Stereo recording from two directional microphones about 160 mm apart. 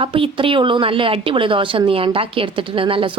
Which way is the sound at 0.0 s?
35° right (ahead or behind).